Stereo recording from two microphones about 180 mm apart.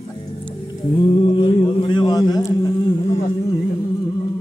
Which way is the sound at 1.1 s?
30° left (ahead or behind).